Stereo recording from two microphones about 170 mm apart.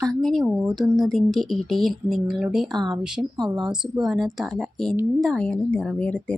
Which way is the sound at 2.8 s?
25° right (ahead or behind).